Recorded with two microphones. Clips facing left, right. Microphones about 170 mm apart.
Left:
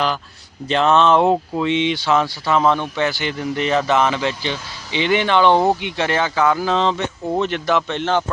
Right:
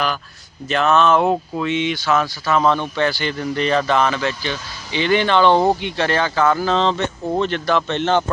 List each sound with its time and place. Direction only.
0.7 s speech: 25° left (ahead or behind); by 8.2 s 5° left (ahead or behind)